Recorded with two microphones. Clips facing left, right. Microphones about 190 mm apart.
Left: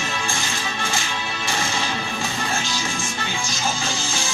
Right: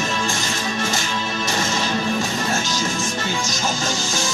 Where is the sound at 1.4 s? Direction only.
40° right (ahead or behind).